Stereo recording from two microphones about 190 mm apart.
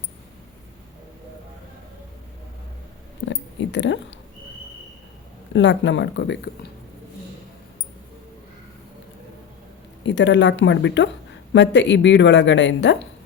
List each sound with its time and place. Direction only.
3.2 s a woman's voice: 70° left (ahead or behind)
5.5 s a woman's voice: 70° left (ahead or behind)
10.0 s a woman's voice: 70° left (ahead or behind)